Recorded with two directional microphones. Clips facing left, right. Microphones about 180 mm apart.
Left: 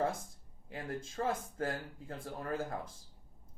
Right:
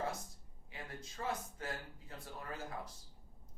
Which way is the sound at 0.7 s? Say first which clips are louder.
Left 9 dB; 50° left (ahead or behind).